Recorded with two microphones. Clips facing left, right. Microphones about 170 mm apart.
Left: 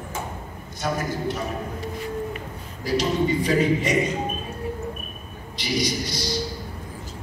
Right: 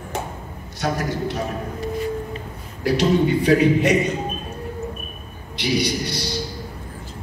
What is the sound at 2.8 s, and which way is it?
A man's voice, 65° right (ahead or behind).